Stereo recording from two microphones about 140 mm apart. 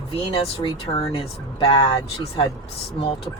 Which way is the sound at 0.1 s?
40° left (ahead or behind).